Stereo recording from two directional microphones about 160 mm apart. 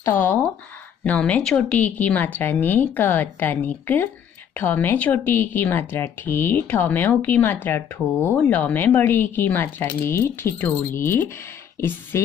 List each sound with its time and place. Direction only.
0.0 s a woman's voice: 15° left (ahead or behind)